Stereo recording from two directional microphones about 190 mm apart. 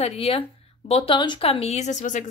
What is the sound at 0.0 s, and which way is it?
A woman's voice, 30° left (ahead or behind).